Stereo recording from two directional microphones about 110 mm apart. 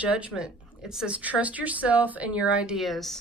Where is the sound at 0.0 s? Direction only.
10° right (ahead or behind).